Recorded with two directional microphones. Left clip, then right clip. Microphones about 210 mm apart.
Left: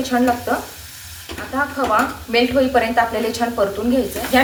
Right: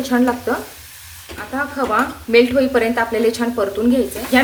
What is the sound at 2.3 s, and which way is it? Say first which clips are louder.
A woman's voice: right 2 dB; 50° right (ahead or behind).